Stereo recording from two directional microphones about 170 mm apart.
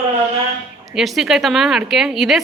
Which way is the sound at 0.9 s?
Centre (ahead or behind).